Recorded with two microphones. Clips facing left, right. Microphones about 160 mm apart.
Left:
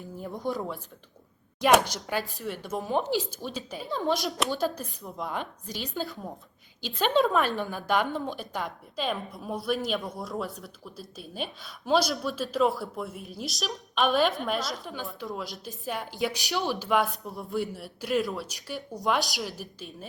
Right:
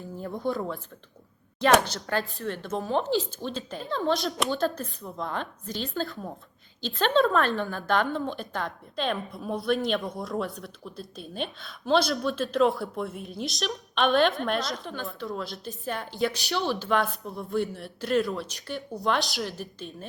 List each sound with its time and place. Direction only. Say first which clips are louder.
0.3 s speech: right 2 dB; 15° left (ahead or behind)
1.8 s a woman's voice: right 2 dB; 10° left (ahead or behind)
16.8 s a woman's voice: even; centre (ahead or behind)